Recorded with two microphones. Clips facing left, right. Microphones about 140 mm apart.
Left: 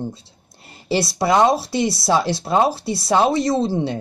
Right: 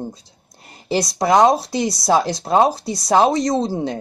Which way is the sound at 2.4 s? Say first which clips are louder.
Right 2 dB; 20° right (ahead or behind).